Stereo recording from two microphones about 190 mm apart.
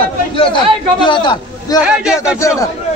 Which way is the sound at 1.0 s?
25° left (ahead or behind).